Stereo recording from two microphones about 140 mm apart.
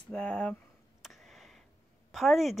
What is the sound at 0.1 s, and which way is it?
Speech, 5° left (ahead or behind).